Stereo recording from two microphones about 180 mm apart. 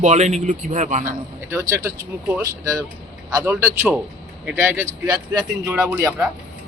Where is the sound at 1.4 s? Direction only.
15° right (ahead or behind).